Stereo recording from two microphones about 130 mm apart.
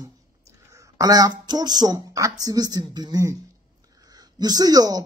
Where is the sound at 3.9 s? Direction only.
30° right (ahead or behind).